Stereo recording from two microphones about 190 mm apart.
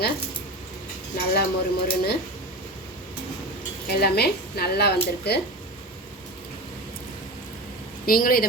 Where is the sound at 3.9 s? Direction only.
55° left (ahead or behind).